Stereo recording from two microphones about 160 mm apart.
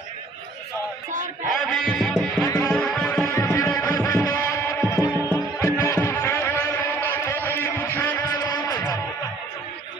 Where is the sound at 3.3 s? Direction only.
20° left (ahead or behind).